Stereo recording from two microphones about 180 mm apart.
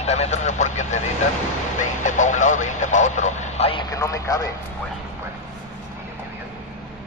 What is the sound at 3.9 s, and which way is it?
Speech, 15° left (ahead or behind).